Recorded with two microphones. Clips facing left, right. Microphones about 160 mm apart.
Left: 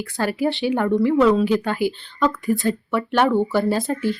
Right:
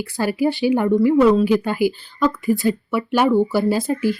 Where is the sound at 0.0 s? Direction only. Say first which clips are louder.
Right 2 dB; 5° right (ahead or behind).